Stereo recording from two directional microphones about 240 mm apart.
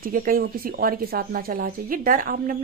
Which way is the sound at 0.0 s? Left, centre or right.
Right.